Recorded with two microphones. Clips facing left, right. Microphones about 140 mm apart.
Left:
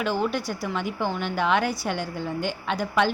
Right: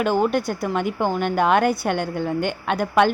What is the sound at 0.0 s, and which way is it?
A woman's voice, 50° right (ahead or behind).